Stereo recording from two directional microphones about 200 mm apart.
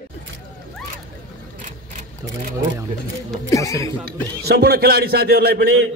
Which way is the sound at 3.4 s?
15° left (ahead or behind).